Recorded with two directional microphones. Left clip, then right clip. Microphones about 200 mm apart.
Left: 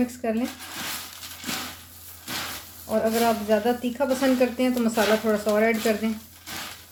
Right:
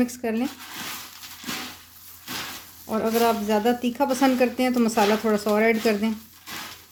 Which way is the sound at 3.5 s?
60° right (ahead or behind).